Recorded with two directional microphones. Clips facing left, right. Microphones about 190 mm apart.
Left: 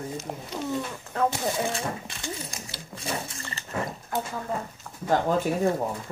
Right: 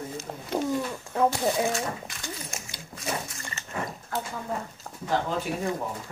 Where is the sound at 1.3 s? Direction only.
30° left (ahead or behind).